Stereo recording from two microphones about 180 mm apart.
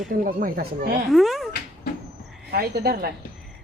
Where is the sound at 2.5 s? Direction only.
60° right (ahead or behind).